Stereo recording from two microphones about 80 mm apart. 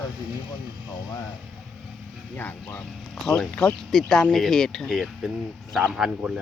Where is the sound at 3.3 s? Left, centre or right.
Centre.